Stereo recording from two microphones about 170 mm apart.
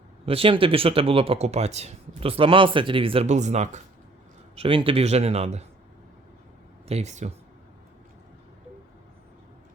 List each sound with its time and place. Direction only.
0.3 s speech: 35° right (ahead or behind)
6.8 s speech: 40° right (ahead or behind)